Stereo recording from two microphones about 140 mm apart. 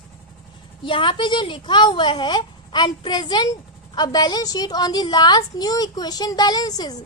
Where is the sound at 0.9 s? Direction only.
35° left (ahead or behind).